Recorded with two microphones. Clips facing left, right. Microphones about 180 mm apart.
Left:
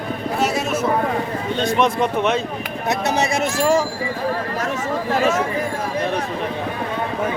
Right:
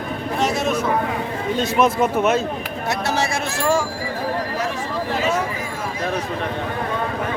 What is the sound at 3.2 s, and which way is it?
Speech, 20° left (ahead or behind).